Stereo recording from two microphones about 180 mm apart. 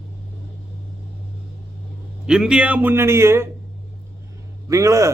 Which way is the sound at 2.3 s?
5° right (ahead or behind).